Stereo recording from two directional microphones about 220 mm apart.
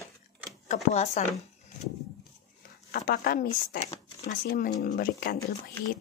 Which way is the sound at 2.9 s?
40° left (ahead or behind).